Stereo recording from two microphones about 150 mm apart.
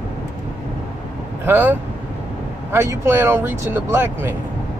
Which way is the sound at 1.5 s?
10° right (ahead or behind).